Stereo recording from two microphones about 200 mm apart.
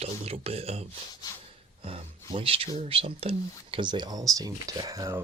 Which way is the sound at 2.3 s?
25° right (ahead or behind).